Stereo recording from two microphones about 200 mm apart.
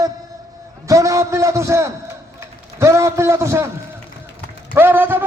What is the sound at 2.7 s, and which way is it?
Speech, 15° right (ahead or behind).